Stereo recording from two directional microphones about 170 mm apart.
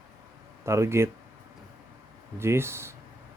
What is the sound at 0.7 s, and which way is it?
Speech, 15° right (ahead or behind).